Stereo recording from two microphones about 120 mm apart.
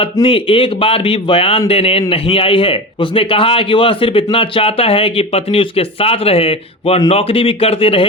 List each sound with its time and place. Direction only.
0.0 s speech: 50° left (ahead or behind)